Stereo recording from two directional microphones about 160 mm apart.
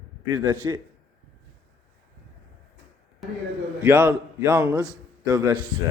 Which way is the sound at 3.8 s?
10° right (ahead or behind).